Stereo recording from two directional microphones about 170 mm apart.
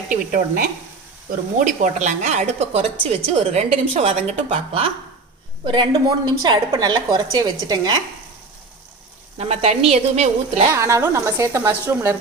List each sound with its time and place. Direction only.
0.1 s a woman's voice: 55° right (ahead or behind); by 4.9 s 40° right (ahead or behind)
5.6 s a woman's voice: 30° right (ahead or behind)
9.4 s a woman's voice: 40° right (ahead or behind)
10.7 s a woman's voice: 15° right (ahead or behind)